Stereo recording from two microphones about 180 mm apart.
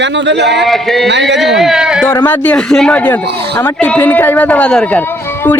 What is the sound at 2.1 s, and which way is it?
Speech, 10° left (ahead or behind).